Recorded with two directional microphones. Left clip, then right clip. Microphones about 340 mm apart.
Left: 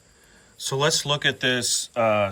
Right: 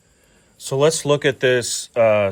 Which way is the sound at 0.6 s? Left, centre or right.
Centre.